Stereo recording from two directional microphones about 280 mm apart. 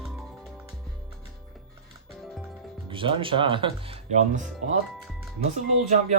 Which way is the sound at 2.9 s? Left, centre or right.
Centre.